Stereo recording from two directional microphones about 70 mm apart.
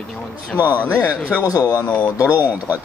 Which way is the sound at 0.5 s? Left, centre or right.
Right.